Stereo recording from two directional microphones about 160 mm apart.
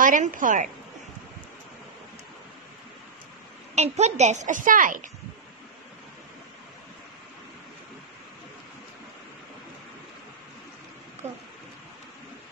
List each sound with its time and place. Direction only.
0.0 s a woman's voice: 55° right (ahead or behind)
3.7 s a child's voice: 45° right (ahead or behind)